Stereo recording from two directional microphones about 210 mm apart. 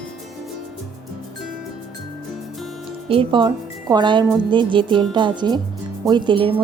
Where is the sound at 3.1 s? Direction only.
25° right (ahead or behind).